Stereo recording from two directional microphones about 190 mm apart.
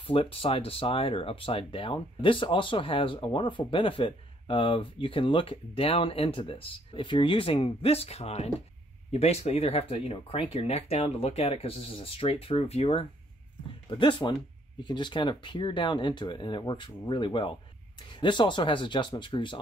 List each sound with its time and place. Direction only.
0.0 s speech: 30° left (ahead or behind)